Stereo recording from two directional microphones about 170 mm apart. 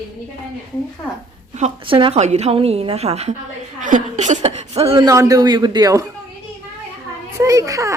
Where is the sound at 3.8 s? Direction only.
45° right (ahead or behind).